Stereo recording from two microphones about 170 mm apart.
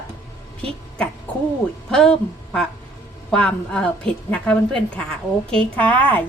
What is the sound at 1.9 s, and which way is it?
A woman's voice, 5° left (ahead or behind).